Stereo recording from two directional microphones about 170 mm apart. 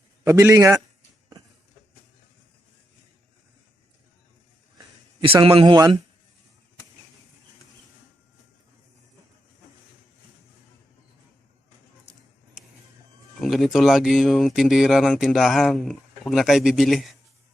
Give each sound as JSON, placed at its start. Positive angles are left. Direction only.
{"t": 0.3, "sound": "a man's voice", "side_deg": -15}
{"t": 5.4, "sound": "speech", "side_deg": -30}
{"t": 13.4, "sound": "speech", "side_deg": 0}